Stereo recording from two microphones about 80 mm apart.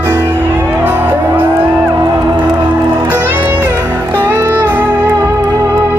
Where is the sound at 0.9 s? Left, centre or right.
Right.